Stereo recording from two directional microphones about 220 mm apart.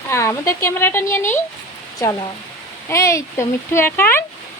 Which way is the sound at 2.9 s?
15° left (ahead or behind).